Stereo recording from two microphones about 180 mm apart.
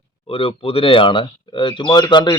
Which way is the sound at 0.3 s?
30° left (ahead or behind).